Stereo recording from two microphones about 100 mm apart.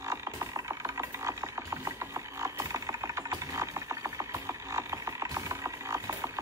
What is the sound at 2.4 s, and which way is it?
Wood, 35° right (ahead or behind).